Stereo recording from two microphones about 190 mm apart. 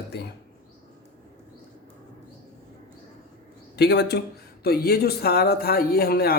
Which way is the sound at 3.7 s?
60° left (ahead or behind).